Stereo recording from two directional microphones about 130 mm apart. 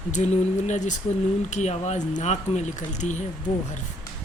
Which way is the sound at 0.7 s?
65° left (ahead or behind).